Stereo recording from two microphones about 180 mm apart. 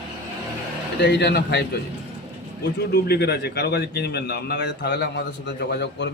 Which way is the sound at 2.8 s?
65° left (ahead or behind).